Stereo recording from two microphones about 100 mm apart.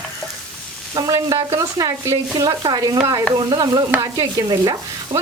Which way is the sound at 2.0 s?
35° right (ahead or behind).